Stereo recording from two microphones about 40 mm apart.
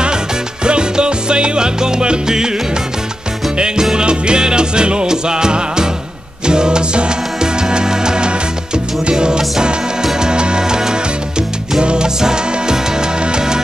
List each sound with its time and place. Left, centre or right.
0.7 s music: right
3.5 s music: right